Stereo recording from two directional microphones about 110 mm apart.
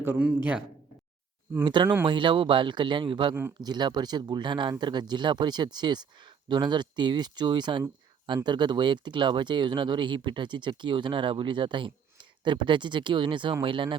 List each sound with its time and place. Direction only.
0.0 s a man's voice: 20° right (ahead or behind)
1.6 s speech: 45° right (ahead or behind)